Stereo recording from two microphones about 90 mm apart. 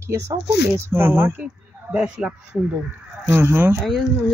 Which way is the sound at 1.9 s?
10° right (ahead or behind).